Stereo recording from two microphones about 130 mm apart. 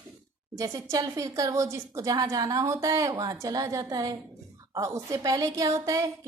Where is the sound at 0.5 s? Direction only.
25° right (ahead or behind).